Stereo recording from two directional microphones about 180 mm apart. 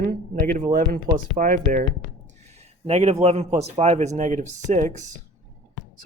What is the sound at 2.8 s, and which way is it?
Speech, 35° right (ahead or behind).